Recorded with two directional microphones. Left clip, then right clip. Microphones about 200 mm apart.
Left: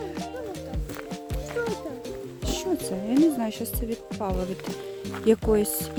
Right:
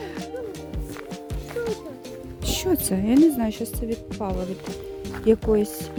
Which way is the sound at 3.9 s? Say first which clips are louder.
Even; centre (ahead or behind).